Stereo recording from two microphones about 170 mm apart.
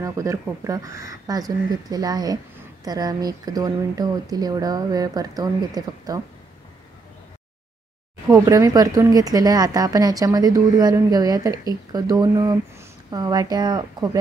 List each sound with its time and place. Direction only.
0.0 s speech: 20° right (ahead or behind)
8.3 s speech: 20° right (ahead or behind)